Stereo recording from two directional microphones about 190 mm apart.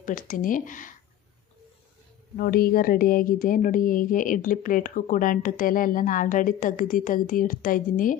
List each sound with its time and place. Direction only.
0.0 s speech: 45° left (ahead or behind)
2.4 s speech: 55° left (ahead or behind)